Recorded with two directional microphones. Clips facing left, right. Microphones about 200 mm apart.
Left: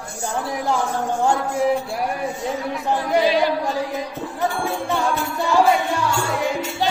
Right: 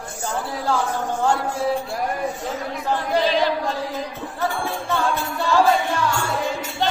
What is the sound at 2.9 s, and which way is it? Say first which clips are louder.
Music: left 2 dB; 10° left (ahead or behind).